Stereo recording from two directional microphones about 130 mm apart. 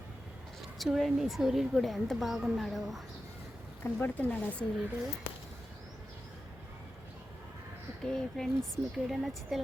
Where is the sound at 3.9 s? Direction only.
15° left (ahead or behind).